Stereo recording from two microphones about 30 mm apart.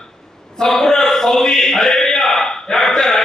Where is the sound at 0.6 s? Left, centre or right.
Centre.